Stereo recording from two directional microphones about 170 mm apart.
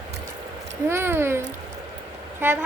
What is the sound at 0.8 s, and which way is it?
Speech, 15° right (ahead or behind).